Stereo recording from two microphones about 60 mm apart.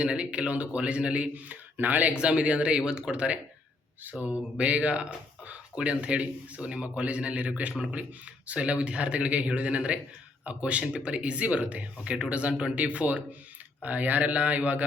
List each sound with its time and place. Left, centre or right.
0.0 s speech: centre
2.1 s speech: centre